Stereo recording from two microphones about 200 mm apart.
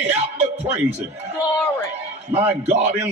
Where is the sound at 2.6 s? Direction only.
35° right (ahead or behind).